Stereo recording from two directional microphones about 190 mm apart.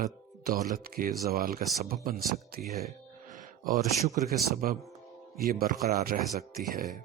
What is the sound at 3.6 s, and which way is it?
Speech, 40° right (ahead or behind).